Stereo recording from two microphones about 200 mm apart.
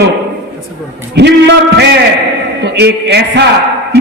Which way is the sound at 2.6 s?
55° right (ahead or behind).